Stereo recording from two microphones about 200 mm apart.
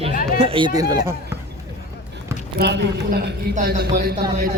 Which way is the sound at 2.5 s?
60° right (ahead or behind).